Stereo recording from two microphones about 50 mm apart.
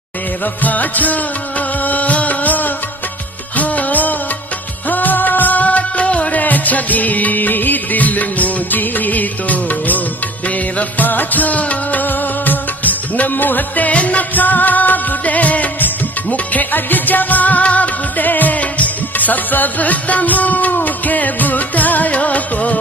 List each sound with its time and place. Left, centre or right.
0.6 s music of bollywood: left
1.8 s music: left